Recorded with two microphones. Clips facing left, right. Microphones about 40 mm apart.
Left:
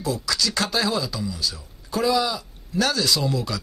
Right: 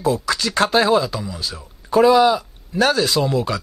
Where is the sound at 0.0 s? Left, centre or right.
Right.